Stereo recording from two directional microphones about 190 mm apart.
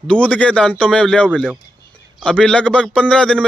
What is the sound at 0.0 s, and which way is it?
A man's voice, 5° left (ahead or behind).